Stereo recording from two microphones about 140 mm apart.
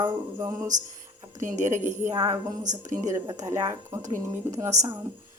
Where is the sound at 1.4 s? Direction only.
60° right (ahead or behind).